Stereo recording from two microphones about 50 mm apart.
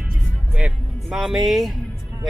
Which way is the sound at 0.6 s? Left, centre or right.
Centre.